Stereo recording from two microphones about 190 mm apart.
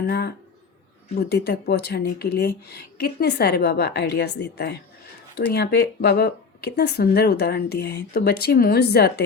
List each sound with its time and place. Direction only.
0.1 s speech: 60° left (ahead or behind)